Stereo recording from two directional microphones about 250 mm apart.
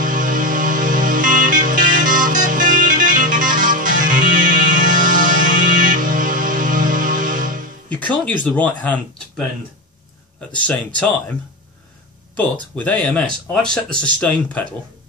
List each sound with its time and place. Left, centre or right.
0.0 s music: right
7.9 s music: centre
8.5 s speech: centre
10.5 s speech: centre
12.5 s speech: centre